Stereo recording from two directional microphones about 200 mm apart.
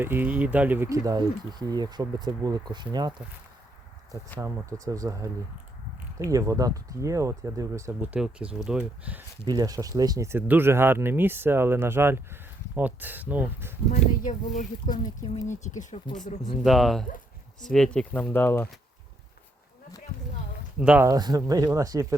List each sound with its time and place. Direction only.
0.0 s speech: 10° right (ahead or behind)
4.4 s speech: 15° right (ahead or behind)
9.4 s speech: 20° right (ahead or behind)
14.3 s speech: 40° left (ahead or behind)
16.6 s speech: centre (ahead or behind)
20.1 s speech: 45° left (ahead or behind)
20.7 s speech: 5° right (ahead or behind)
21.1 s speech: 20° right (ahead or behind)